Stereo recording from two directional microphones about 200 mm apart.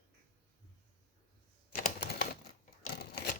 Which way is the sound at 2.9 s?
55° left (ahead or behind).